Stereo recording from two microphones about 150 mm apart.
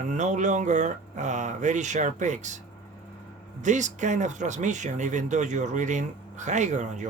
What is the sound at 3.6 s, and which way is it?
Speech, 55° right (ahead or behind).